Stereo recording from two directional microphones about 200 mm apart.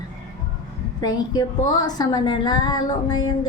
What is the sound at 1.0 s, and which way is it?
Speech, 20° left (ahead or behind).